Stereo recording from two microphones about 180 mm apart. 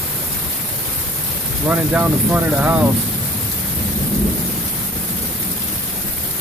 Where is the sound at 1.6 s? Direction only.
10° right (ahead or behind).